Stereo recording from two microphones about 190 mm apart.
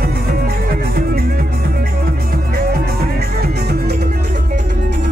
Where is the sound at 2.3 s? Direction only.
50° right (ahead or behind).